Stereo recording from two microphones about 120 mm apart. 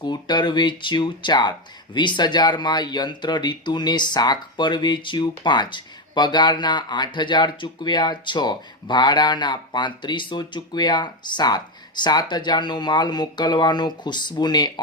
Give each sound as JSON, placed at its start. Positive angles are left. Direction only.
{"t": 0.0, "sound": "speech", "side_deg": 35}